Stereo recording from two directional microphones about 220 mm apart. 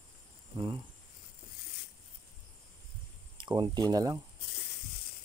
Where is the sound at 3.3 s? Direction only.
20° right (ahead or behind).